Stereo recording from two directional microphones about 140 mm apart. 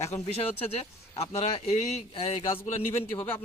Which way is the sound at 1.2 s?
45° left (ahead or behind).